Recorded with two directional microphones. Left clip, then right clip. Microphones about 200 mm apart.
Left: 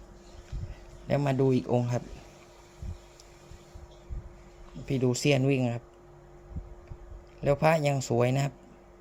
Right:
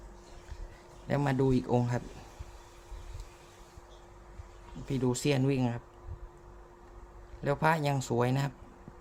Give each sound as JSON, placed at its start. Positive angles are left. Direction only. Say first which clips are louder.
{"t": 1.0, "sound": "speech", "louder": "left 3 dB", "side_deg": 10}
{"t": 4.9, "sound": "speech", "louder": "left 4 dB", "side_deg": 10}
{"t": 7.4, "sound": "speech", "louder": "left 4 dB", "side_deg": 10}